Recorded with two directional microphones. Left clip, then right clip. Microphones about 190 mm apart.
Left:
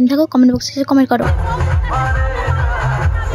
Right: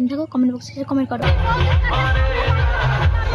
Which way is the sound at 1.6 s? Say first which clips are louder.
Left 1 dB; 10° left (ahead or behind).